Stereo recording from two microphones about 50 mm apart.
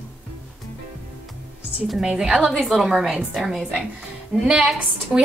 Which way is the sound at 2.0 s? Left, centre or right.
Centre.